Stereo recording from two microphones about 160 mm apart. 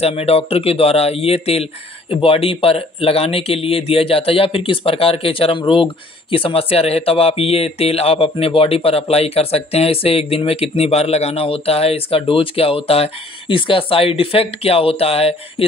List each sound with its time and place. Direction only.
0.0 s speech: 40° left (ahead or behind)